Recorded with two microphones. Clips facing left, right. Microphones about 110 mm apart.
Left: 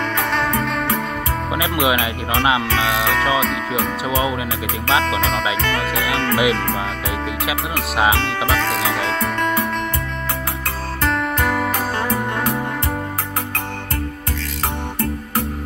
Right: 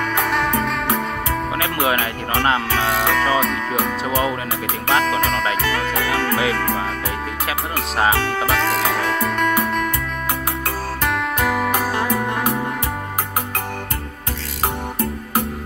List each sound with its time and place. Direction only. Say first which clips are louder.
0.3 s music: even; 15° right (ahead or behind)
1.6 s speech: left 3 dB; 15° left (ahead or behind)
4.8 s speech: even; 15° left (ahead or behind)
8.0 s speech: even; 15° left (ahead or behind)
11.3 s music: even; 10° right (ahead or behind)